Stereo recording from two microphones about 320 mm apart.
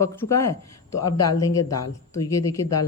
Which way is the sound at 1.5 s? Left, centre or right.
Centre.